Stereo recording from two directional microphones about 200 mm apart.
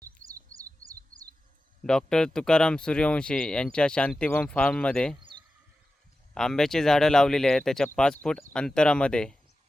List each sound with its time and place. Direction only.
0.2 s chirp: 40° right (ahead or behind)
0.5 s bird: 15° right (ahead or behind)
1.8 s speech: 5° left (ahead or behind)
6.3 s speech: centre (ahead or behind)